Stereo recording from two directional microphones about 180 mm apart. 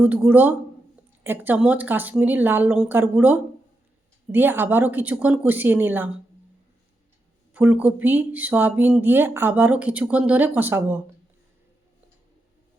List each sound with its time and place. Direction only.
0.3 s speech: 10° right (ahead or behind)
7.5 s speech: 10° right (ahead or behind)